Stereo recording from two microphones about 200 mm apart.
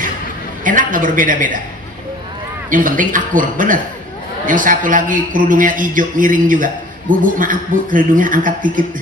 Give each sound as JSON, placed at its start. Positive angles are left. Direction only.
{"t": 0.7, "sound": "speech", "side_deg": -40}
{"t": 2.7, "sound": "a man's voice", "side_deg": -40}